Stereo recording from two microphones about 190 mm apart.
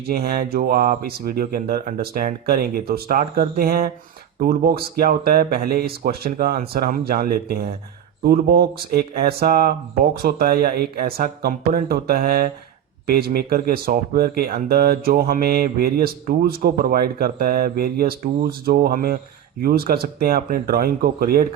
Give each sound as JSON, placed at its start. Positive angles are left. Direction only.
{"t": 0.1, "sound": "speech", "side_deg": -50}